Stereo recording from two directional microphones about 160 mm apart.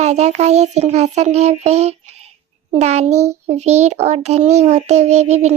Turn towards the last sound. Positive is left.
turn(degrees=-45)  # may be behind; listen again after turning